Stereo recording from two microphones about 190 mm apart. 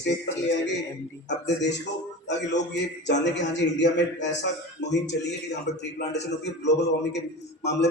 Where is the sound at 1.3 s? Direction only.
65° left (ahead or behind).